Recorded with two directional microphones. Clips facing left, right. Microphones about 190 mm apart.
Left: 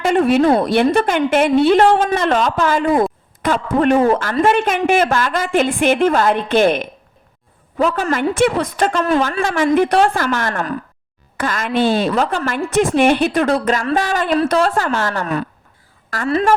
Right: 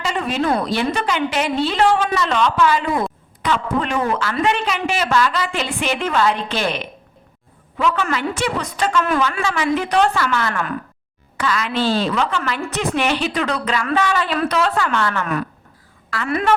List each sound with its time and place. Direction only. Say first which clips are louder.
0.0 s a sound: left 9 dB; 50° left (ahead or behind)
0.6 s a woman's voice: left 6 dB; 55° left (ahead or behind)
3.9 s speech: left 8 dB; 30° left (ahead or behind)
4.2 s a woman's voice: left 5 dB; 45° left (ahead or behind)
7.8 s a woman's voice: left 3 dB; 40° left (ahead or behind)
8.9 s a woman's voice: left 2 dB; 35° left (ahead or behind)